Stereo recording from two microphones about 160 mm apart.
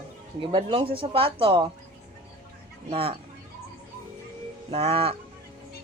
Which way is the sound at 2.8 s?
35° right (ahead or behind).